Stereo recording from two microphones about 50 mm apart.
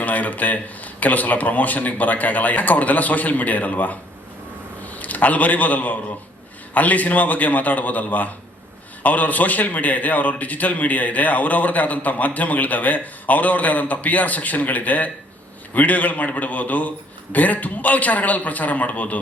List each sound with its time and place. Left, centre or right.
0.0 s a man's voice: left